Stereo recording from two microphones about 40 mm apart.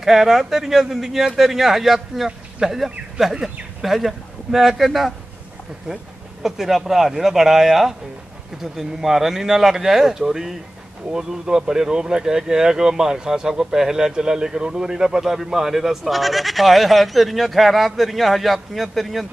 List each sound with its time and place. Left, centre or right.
0.0 s speech: centre
3.3 s speech: right
3.8 s speech: centre
5.9 s speech: centre
6.4 s speech: centre